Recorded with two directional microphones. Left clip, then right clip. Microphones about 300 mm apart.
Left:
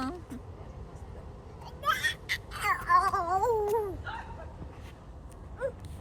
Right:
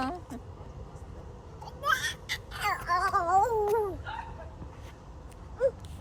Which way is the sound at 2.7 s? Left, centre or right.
Centre.